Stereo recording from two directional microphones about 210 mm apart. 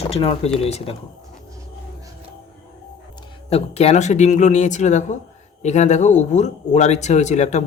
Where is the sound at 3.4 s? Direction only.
30° left (ahead or behind).